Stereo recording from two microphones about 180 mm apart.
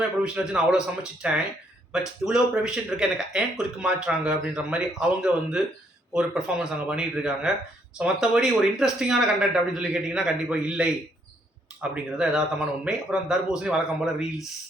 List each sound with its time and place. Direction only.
0.2 s speech: 5° right (ahead or behind)